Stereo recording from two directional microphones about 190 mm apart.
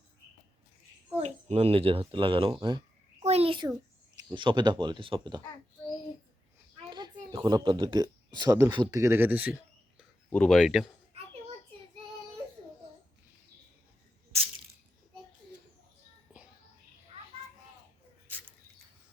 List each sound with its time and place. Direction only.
1.2 s speech: 35° right (ahead or behind)
3.2 s a sound: 30° right (ahead or behind)
4.3 s speech: 25° right (ahead or behind)
6.7 s speech: 20° right (ahead or behind)
10.2 s speech: 5° left (ahead or behind)